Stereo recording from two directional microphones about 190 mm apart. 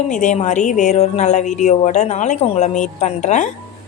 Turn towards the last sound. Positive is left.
turn(degrees=40)  # may be behind; listen again after turning